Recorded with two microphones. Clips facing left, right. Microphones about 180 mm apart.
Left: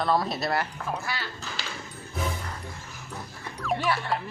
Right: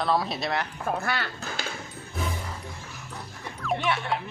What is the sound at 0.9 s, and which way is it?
Speech, 55° right (ahead or behind).